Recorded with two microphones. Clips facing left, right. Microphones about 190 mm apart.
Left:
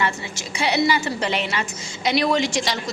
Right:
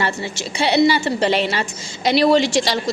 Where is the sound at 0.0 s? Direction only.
30° right (ahead or behind).